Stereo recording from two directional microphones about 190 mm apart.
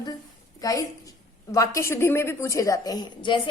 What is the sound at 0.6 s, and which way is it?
A woman's voice, 20° left (ahead or behind).